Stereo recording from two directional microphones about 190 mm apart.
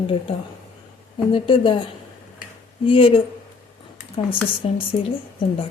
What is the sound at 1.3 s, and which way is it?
Speech, 25° left (ahead or behind).